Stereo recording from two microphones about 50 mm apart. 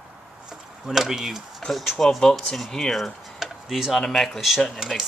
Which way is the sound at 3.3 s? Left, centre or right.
Centre.